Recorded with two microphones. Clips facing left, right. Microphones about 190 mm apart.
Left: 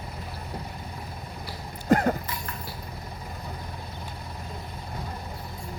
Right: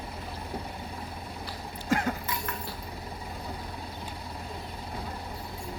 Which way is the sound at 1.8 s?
45° left (ahead or behind).